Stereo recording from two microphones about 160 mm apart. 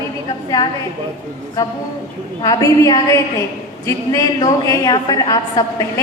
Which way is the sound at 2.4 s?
20° left (ahead or behind).